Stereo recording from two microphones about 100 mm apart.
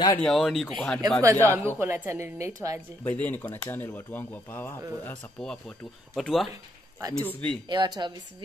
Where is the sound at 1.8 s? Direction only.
25° right (ahead or behind).